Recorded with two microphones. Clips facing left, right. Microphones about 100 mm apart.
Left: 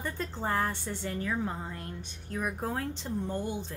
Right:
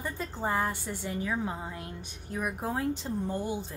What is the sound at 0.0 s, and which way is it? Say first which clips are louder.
A woman's voice: right 1 dB; 5° right (ahead or behind).